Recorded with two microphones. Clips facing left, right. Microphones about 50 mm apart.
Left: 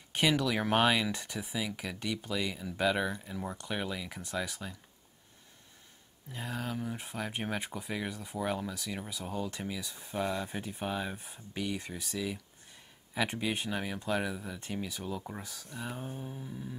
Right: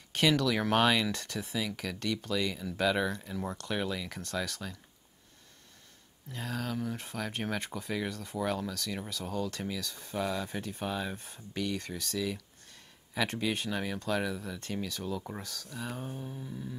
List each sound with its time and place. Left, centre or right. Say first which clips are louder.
0.1 s speech: right 2 dB; centre
6.3 s speech: right 1 dB; centre
16.2 s a sound: right 1 dB; centre